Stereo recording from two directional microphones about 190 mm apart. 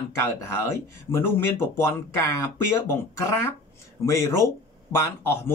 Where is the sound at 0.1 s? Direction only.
15° left (ahead or behind).